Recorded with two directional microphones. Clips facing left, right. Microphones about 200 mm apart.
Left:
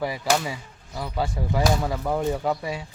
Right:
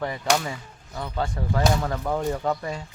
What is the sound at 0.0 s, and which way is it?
Speech, 5° left (ahead or behind).